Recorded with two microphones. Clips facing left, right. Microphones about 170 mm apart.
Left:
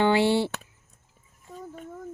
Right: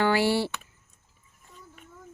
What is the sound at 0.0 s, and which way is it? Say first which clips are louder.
Speech: left 2 dB; 20° left (ahead or behind).